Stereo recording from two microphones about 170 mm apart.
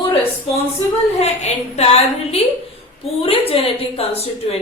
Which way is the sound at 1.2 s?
40° left (ahead or behind).